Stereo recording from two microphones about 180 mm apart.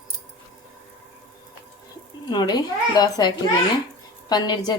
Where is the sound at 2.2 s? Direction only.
25° left (ahead or behind).